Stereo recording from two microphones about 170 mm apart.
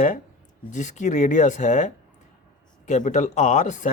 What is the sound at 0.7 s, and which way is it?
Speech, 45° left (ahead or behind).